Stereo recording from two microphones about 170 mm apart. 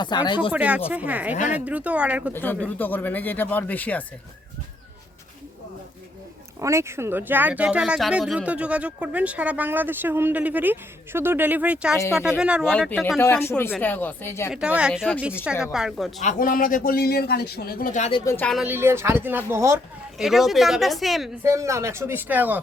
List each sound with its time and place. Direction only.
0.0 s speech: 25° left (ahead or behind)
0.5 s speech: 10° right (ahead or behind)
2.3 s speech: 10° left (ahead or behind)
6.6 s speech: 15° right (ahead or behind); by 13.1 s centre (ahead or behind)
13.1 s speech: 15° left (ahead or behind)
14.5 s speech: 5° right (ahead or behind)
16.2 s a man's voice: 55° left (ahead or behind)
18.3 s speech: 10° left (ahead or behind)
18.5 s speech: 10° right (ahead or behind)
20.1 s speech: centre (ahead or behind)
21.4 s speech: 15° right (ahead or behind)